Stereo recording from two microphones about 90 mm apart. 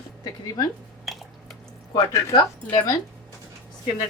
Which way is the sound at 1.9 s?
50° left (ahead or behind).